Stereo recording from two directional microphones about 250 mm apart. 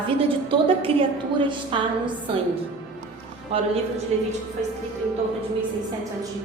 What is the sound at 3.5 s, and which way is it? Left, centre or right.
Speech, right.